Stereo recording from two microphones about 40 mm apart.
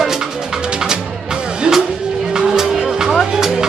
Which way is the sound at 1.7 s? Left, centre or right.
Right.